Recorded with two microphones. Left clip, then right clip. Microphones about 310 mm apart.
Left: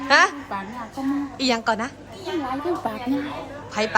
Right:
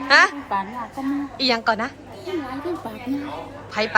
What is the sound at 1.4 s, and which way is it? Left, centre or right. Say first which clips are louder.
Speech: right 3 dB; centre.